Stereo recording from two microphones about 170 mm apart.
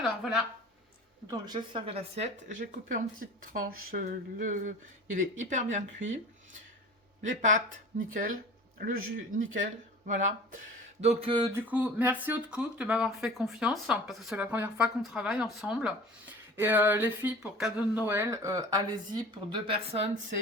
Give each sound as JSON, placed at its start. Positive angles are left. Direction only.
{"t": 0.0, "sound": "speech", "side_deg": 0}
{"t": 1.3, "sound": "speech", "side_deg": -25}
{"t": 7.3, "sound": "speech", "side_deg": -50}
{"t": 11.0, "sound": "a sound", "side_deg": -35}
{"t": 11.5, "sound": "speech", "side_deg": -10}